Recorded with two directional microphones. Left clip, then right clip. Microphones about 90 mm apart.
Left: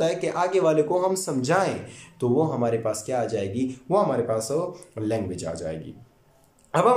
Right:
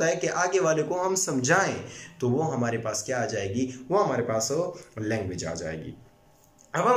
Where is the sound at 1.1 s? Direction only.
25° left (ahead or behind).